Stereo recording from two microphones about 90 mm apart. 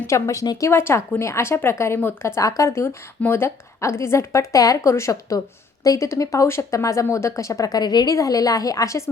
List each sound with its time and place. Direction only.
0.1 s speech: 40° left (ahead or behind)